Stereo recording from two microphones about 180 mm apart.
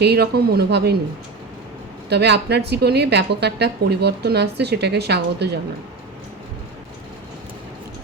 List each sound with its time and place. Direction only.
0.0 s speech: 65° right (ahead or behind)
2.0 s a woman's voice: 70° right (ahead or behind)